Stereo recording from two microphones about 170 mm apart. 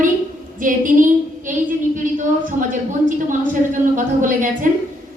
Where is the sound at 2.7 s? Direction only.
50° right (ahead or behind).